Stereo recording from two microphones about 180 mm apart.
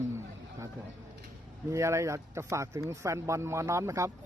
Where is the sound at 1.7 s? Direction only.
15° right (ahead or behind).